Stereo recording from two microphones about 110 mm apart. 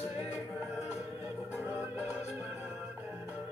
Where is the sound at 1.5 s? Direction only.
20° right (ahead or behind).